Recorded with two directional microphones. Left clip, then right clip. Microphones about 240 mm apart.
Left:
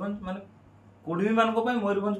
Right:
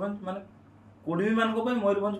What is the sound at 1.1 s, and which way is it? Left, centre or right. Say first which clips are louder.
Speech: left 2 dB; centre.